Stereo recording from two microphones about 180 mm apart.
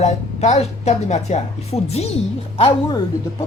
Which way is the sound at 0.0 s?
40° left (ahead or behind).